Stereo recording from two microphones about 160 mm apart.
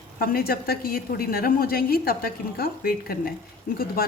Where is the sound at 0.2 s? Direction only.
70° left (ahead or behind).